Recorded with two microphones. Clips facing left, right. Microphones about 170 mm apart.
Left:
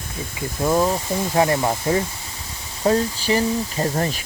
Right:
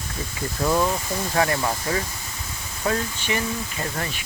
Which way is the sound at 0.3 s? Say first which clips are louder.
Left 3 dB; 20° left (ahead or behind).